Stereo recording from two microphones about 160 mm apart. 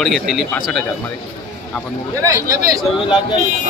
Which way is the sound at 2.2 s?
20° right (ahead or behind).